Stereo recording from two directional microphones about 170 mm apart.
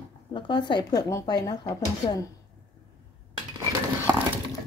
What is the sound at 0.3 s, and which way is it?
Speech, 30° left (ahead or behind).